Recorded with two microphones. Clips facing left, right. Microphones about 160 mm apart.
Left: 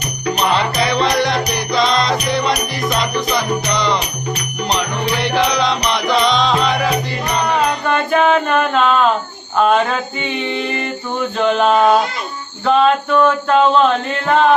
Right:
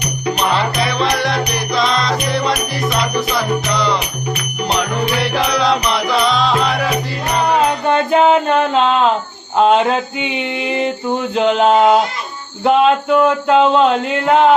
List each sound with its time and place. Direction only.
0.3 s music: centre (ahead or behind)
5.2 s music: 5° right (ahead or behind)
7.9 s music: 25° right (ahead or behind)
11.3 s music: 20° right (ahead or behind)
12.6 s speech: 15° right (ahead or behind)